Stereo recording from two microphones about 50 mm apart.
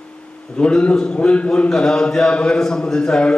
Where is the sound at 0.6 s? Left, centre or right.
Left.